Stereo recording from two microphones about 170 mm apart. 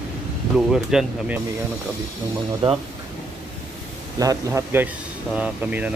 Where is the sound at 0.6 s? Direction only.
Centre (ahead or behind).